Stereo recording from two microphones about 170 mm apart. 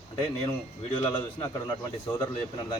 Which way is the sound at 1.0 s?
25° left (ahead or behind).